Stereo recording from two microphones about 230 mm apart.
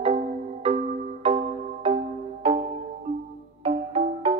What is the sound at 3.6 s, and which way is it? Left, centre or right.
Music, right.